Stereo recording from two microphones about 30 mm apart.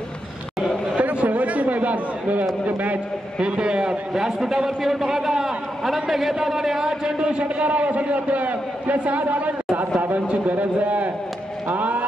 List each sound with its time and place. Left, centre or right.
0.9 s chatter: right
2.6 s a man's voice: right
3.3 s a man's voice: right
4.1 s a man's voice: centre
7.2 s a man's voice: right